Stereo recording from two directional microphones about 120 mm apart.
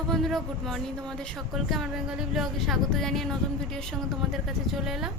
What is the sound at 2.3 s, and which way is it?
A woman's voice, centre (ahead or behind).